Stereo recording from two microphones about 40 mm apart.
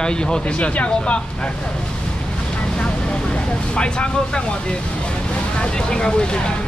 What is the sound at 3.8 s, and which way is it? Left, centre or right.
Speech, left.